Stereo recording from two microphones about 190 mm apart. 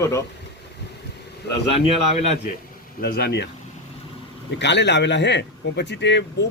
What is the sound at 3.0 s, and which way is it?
Speech, 55° left (ahead or behind).